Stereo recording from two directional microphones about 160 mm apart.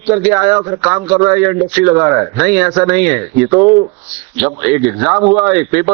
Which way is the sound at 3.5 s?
30° right (ahead or behind).